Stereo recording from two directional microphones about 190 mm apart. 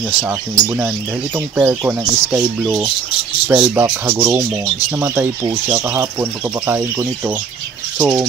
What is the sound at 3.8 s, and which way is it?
Speech, 20° right (ahead or behind).